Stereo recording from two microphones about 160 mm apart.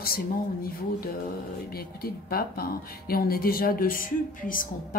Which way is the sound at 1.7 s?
75° left (ahead or behind).